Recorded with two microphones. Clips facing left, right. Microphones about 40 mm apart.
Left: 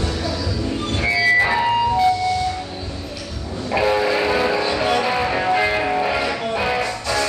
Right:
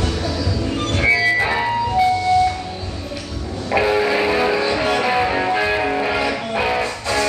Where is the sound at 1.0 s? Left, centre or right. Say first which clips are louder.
Right 4 dB; right.